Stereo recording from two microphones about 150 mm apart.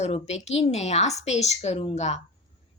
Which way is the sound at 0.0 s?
45° left (ahead or behind).